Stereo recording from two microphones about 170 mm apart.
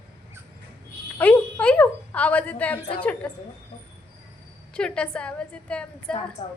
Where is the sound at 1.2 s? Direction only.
10° left (ahead or behind).